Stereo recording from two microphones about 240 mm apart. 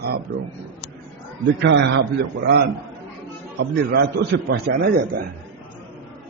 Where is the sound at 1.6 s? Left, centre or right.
Right.